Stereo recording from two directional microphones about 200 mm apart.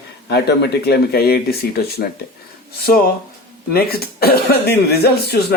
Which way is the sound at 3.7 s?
50° left (ahead or behind).